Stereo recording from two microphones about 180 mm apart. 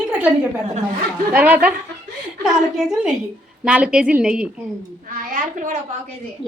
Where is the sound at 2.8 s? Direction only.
Centre (ahead or behind).